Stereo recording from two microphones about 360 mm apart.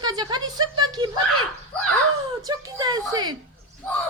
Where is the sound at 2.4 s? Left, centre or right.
Centre.